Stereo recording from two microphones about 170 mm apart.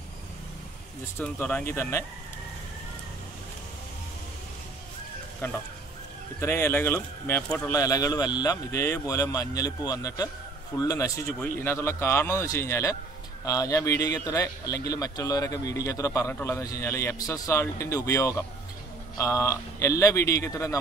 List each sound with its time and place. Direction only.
1.1 s speech: 10° left (ahead or behind)
5.4 s speech: 15° left (ahead or behind)